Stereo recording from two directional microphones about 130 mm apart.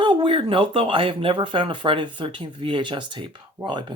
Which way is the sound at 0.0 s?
40° right (ahead or behind).